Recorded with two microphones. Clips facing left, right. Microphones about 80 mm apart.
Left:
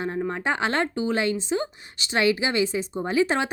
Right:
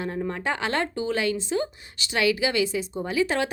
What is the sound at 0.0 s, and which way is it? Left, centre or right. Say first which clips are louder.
Speech: left 2 dB; left.